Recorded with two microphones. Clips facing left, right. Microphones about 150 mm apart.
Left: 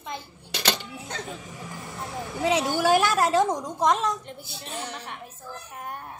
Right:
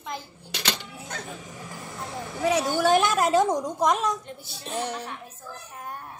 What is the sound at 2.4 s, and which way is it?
Speech, 20° left (ahead or behind).